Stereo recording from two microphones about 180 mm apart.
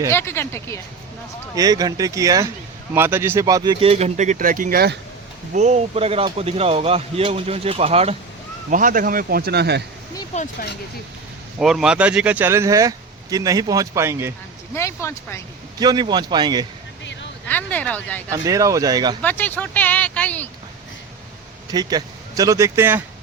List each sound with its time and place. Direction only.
0.1 s speech: 15° left (ahead or behind)
1.5 s speech: 20° right (ahead or behind); by 4.9 s 55° right (ahead or behind)
5.5 s speech: 40° right (ahead or behind)
8.7 s speech: 45° right (ahead or behind); by 9.8 s 65° right (ahead or behind)
10.3 s speech: 45° left (ahead or behind)
11.6 s speech: 5° right (ahead or behind)
14.8 s speech: 15° left (ahead or behind)
15.8 s speech: 25° right (ahead or behind)
17.5 s speech: 10° left (ahead or behind)
18.3 s speech: 20° right (ahead or behind)
19.2 s speech: 10° left (ahead or behind)
21.7 s speech: 20° right (ahead or behind)